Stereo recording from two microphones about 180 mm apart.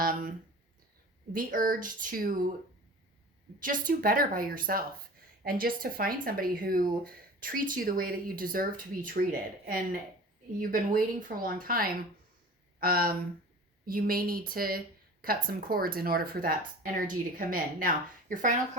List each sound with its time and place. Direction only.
0.0 s speech: 50° right (ahead or behind)
3.6 s speech: 50° right (ahead or behind)